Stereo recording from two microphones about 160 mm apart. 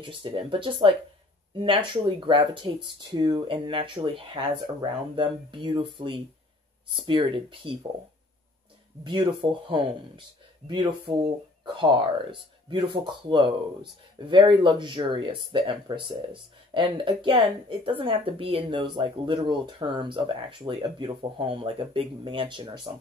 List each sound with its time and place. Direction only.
0.0 s speech: 35° right (ahead or behind)
9.0 s speech: 30° right (ahead or behind)